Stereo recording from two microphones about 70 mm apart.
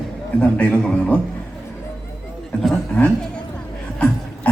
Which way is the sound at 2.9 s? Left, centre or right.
Centre.